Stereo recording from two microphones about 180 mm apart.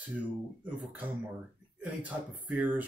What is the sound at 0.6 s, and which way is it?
Speech, 10° right (ahead or behind).